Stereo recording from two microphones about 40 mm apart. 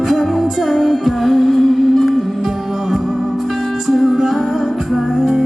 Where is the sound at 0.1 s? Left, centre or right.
Centre.